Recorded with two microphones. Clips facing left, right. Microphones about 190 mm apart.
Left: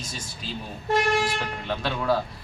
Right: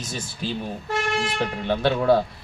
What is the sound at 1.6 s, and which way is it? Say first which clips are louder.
Speech: right 7 dB; 50° right (ahead or behind).